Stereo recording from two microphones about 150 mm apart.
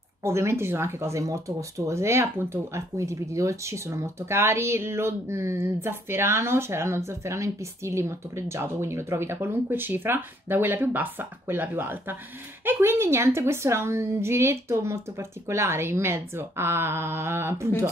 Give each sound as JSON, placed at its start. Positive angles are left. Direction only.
{"t": 0.2, "sound": "speech", "side_deg": -20}